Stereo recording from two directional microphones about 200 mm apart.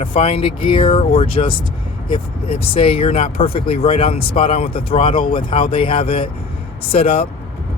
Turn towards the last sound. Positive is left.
turn(degrees=30)  # may be behind; listen again after turning